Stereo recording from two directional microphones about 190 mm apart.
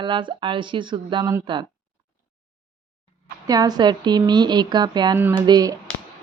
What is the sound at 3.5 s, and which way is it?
Speech, 20° right (ahead or behind).